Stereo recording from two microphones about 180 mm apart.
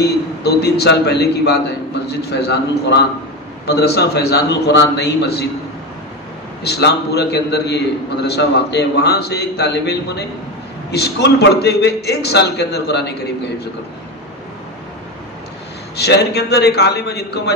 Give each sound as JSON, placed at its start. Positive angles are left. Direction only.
{"t": 0.0, "sound": "a man's voice", "side_deg": 65}
{"t": 6.6, "sound": "a man's voice", "side_deg": 65}
{"t": 16.0, "sound": "a man's voice", "side_deg": 65}